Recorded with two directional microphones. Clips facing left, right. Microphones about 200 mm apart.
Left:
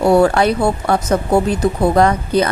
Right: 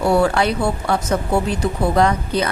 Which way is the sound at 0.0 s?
45° left (ahead or behind).